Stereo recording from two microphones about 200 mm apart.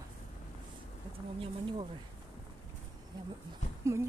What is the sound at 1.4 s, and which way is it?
Speech, 25° right (ahead or behind).